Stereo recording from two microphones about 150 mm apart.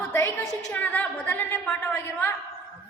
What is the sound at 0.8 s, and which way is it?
A woman's voice, 10° left (ahead or behind).